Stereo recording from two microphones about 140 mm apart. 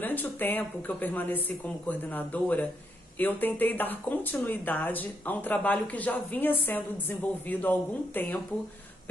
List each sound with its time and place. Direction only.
0.0 s speech: 15° left (ahead or behind)